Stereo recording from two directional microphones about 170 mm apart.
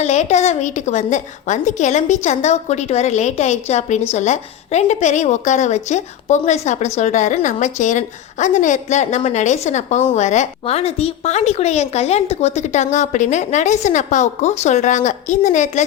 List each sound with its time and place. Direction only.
0.0 s a woman's voice: 40° left (ahead or behind)